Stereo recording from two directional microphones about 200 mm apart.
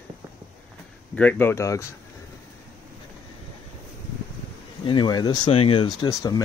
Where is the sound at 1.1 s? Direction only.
10° left (ahead or behind).